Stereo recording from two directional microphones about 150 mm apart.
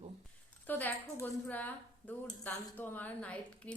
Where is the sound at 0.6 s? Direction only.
10° left (ahead or behind).